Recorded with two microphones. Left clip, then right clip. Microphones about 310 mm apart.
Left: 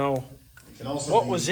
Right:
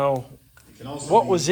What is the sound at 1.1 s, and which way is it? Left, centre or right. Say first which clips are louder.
Speech: right 5 dB; centre.